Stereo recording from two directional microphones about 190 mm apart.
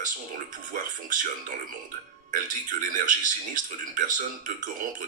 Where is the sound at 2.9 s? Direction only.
45° right (ahead or behind).